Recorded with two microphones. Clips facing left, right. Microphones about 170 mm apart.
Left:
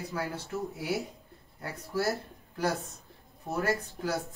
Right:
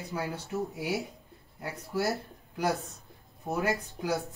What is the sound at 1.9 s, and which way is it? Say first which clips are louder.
Speech: even; 20° right (ahead or behind).